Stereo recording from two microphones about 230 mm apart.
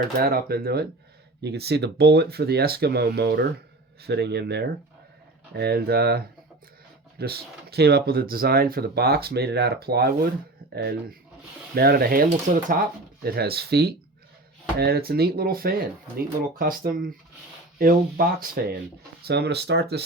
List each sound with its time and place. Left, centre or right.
0.2 s speech: right